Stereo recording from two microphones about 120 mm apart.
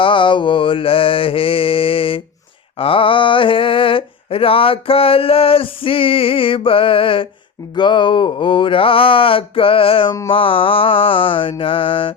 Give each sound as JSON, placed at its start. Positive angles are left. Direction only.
{"t": 0.0, "sound": "mantra", "side_deg": 45}